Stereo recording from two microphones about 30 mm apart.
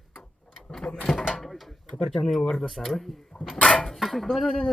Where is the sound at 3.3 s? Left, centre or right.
Left.